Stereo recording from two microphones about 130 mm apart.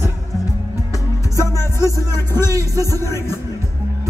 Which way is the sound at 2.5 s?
25° right (ahead or behind).